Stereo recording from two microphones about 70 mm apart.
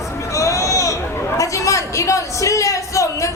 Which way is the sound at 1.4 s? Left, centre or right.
Left.